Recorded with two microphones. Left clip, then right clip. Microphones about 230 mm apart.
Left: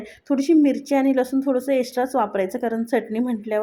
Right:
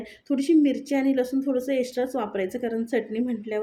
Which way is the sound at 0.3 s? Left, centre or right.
Centre.